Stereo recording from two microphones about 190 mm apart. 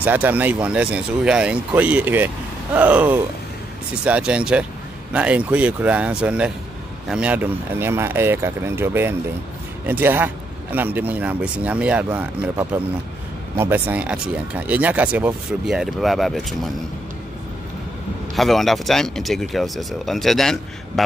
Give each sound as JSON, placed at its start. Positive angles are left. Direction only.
{"t": 0.0, "sound": "speech", "side_deg": -10}
{"t": 18.3, "sound": "speech", "side_deg": 0}